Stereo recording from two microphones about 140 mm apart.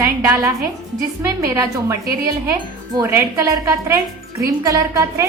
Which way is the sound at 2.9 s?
20° right (ahead or behind).